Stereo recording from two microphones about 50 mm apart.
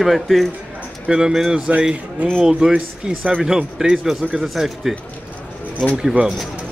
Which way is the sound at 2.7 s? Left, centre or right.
Right.